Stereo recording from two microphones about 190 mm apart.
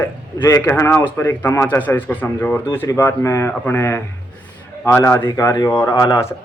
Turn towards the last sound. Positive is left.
turn(degrees=15)  # may be behind; listen again after turning